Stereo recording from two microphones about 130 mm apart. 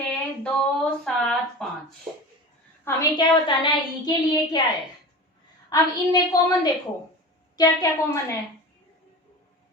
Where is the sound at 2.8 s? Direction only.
30° left (ahead or behind).